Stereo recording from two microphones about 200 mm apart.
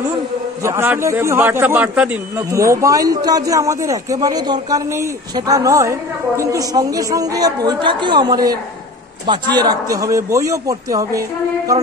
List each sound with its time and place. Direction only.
0.7 s a man's voice: 15° right (ahead or behind)